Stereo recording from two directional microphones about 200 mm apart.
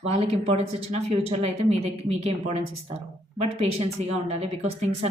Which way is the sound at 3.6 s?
30° right (ahead or behind).